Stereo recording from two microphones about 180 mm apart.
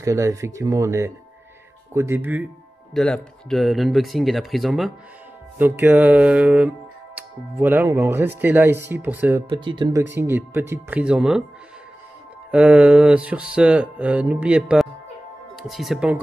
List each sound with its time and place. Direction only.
0.0 s music: 15° right (ahead or behind)
2.9 s speech: 5° left (ahead or behind)
5.6 s music: 10° right (ahead or behind)
9.7 s speech: 25° right (ahead or behind)
10.1 s music: 10° right (ahead or behind)
12.4 s music: 5° right (ahead or behind)
15.5 s speech: centre (ahead or behind)